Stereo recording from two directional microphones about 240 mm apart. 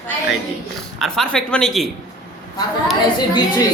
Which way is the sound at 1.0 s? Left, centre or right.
Centre.